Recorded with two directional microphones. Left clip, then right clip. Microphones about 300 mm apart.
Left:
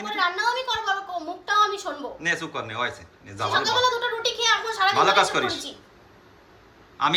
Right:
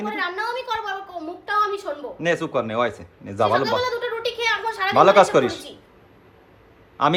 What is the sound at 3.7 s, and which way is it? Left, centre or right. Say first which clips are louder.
Speech: left 1 dB; centre.